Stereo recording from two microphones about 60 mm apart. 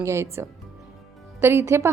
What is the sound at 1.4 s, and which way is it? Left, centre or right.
Speech, right.